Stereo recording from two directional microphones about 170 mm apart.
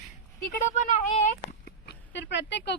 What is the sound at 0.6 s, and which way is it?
Speech, 45° left (ahead or behind).